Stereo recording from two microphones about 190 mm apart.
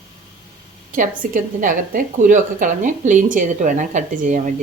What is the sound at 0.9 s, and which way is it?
A woman's voice, 45° right (ahead or behind).